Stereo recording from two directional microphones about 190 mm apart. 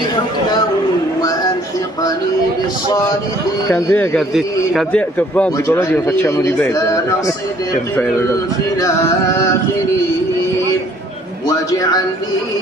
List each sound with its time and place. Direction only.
3.7 s a man's voice: 10° left (ahead or behind)
11.4 s a man's voice: 20° left (ahead or behind)